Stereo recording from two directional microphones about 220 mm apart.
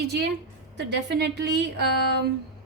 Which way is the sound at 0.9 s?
50° right (ahead or behind).